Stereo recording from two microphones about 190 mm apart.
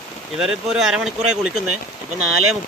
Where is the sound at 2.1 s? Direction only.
90° right.